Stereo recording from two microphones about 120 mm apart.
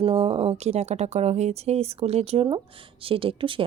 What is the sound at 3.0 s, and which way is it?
Speech, 50° right (ahead or behind).